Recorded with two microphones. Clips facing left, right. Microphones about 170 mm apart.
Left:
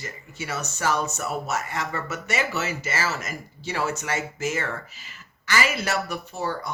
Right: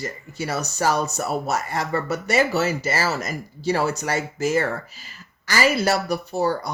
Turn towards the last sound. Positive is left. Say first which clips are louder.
# right 7 dB
turn(degrees=-35)  # may be behind; listen again after turning